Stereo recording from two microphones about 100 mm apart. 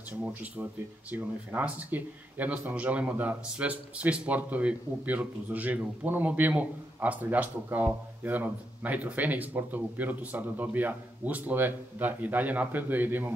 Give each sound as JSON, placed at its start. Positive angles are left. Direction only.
{"t": 0.2, "sound": "speech", "side_deg": -15}